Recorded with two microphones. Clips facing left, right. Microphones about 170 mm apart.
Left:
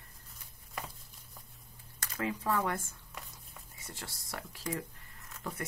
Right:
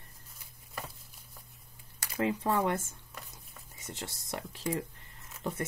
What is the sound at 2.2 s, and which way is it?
Speech, 25° right (ahead or behind).